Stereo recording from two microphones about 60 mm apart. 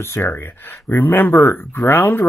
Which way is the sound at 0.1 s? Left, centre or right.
Left.